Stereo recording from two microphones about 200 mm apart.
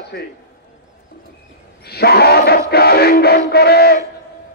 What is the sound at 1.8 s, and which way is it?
Music, 50° left (ahead or behind).